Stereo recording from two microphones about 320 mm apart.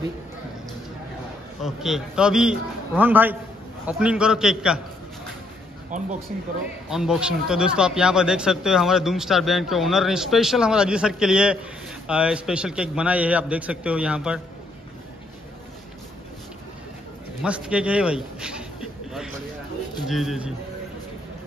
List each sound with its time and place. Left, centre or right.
1.6 s speech: centre
5.9 s speech: right
6.9 s speech: centre
17.4 s a sound: centre
20.1 s speech: centre